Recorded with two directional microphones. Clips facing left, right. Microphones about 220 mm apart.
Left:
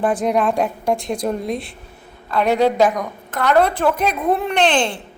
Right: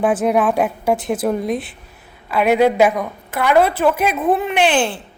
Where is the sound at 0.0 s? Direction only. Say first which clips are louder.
Right 2 dB; 5° right (ahead or behind).